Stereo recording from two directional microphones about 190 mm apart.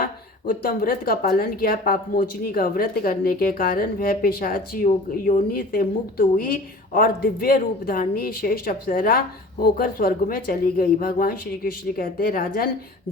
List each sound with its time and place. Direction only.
0.0 s a woman's voice: 50° left (ahead or behind)